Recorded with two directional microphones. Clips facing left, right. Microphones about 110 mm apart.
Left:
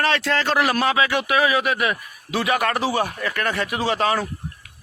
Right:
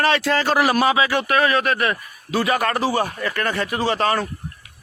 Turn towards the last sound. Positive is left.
turn(degrees=5)  # may be behind; listen again after turning